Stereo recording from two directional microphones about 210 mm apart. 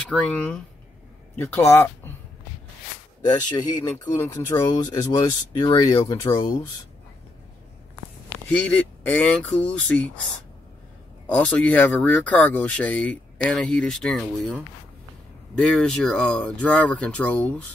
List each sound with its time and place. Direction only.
0.1 s speech: centre (ahead or behind)
3.9 s speech: 15° left (ahead or behind)
8.5 s speech: 5° left (ahead or behind)
11.2 s speech: 5° left (ahead or behind)